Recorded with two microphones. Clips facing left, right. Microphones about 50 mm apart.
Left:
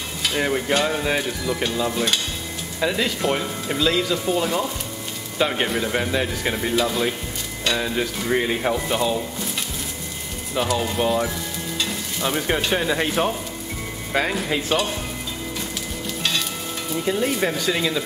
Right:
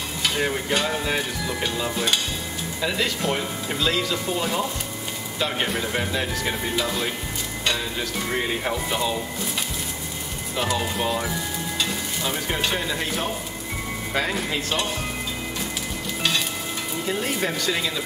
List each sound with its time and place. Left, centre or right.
0.2 s stir: centre
1.6 s speech: centre
7.7 s speech: centre
10.6 s speech: centre
12.2 s speech: centre
12.7 s speech: left
14.1 s speech: centre
17.1 s speech: centre